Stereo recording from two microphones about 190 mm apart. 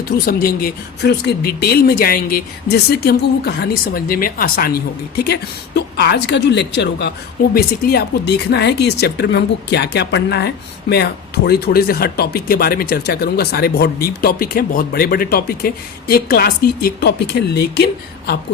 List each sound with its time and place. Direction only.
0.3 s speech: 50° left (ahead or behind)
7.5 s speech: 55° left (ahead or behind)